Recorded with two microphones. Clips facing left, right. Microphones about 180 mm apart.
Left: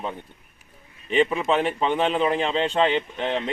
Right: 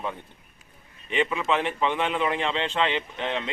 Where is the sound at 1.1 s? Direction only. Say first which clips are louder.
Left 4 dB; 35° left (ahead or behind).